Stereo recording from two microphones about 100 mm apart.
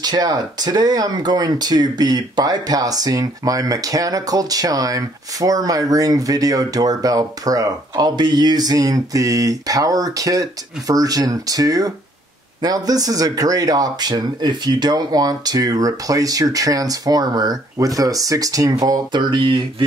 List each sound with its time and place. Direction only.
0.0 s speech: 40° right (ahead or behind)